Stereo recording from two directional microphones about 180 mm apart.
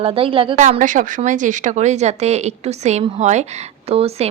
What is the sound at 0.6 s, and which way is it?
A woman's voice, 45° right (ahead or behind).